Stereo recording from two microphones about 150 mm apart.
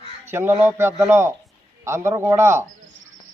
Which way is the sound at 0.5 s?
15° right (ahead or behind).